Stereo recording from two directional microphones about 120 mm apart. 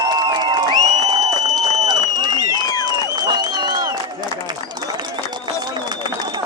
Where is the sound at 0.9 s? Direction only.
35° right (ahead or behind).